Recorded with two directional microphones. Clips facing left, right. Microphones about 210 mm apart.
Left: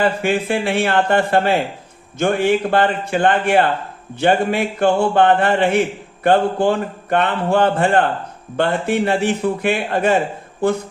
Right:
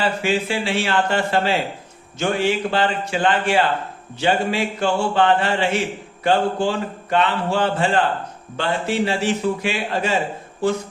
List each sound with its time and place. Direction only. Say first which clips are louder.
0.0 s speech: left 3 dB; 55° left (ahead or behind)